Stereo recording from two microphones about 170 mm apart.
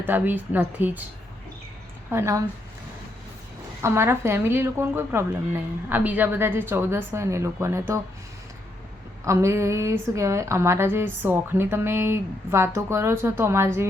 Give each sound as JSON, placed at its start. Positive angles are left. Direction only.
{"t": 0.1, "sound": "a woman's voice", "side_deg": -10}
{"t": 2.0, "sound": "a woman's voice", "side_deg": -15}
{"t": 3.8, "sound": "a woman's voice", "side_deg": -15}
{"t": 9.2, "sound": "a woman's voice", "side_deg": -15}